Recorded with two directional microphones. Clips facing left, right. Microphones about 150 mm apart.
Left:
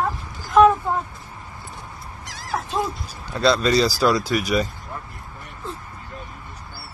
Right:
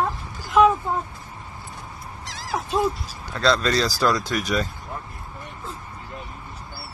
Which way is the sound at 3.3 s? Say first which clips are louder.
Left 3 dB; 10° left (ahead or behind).